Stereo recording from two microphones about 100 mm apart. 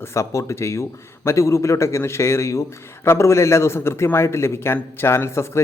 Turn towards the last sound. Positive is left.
turn(degrees=25)  # may be behind; listen again after turning